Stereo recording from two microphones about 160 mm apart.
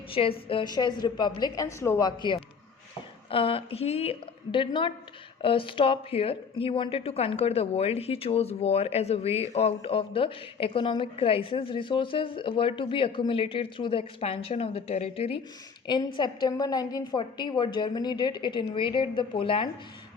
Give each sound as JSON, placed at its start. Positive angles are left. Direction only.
{"t": 0.1, "sound": "a woman's voice", "side_deg": 35}